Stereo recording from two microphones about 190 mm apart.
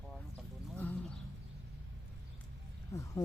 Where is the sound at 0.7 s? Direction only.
10° left (ahead or behind).